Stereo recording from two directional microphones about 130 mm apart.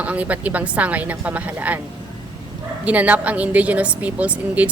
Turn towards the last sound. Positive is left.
turn(degrees=-10)  # may be behind; listen again after turning